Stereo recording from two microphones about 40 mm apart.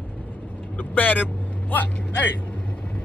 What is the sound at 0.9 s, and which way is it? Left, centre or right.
Speech, left.